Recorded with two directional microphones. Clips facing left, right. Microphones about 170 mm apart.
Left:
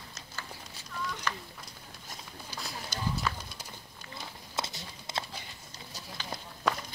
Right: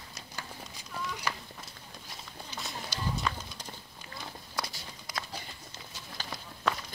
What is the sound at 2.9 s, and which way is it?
Clip-clop, 50° left (ahead or behind).